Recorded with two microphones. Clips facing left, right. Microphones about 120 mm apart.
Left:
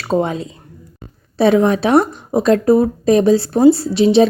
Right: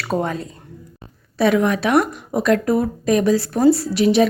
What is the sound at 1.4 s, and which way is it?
Speech, 30° left (ahead or behind).